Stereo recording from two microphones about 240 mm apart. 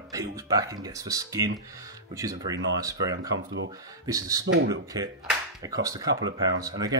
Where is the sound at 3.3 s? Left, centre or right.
Right.